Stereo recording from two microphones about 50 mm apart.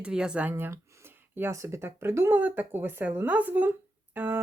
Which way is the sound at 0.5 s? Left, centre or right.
Right.